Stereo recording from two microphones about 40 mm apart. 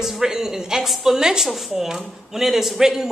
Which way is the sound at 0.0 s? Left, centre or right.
Centre.